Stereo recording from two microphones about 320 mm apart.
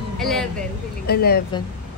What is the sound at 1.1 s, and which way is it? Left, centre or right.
Speech, left.